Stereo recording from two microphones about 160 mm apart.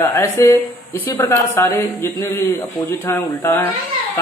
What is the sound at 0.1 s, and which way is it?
Speech, 15° left (ahead or behind).